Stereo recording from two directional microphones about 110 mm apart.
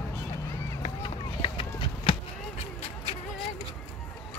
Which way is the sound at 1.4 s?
50° left (ahead or behind).